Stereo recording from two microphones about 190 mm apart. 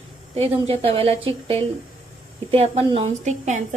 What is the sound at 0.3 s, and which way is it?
A woman's voice, 30° right (ahead or behind).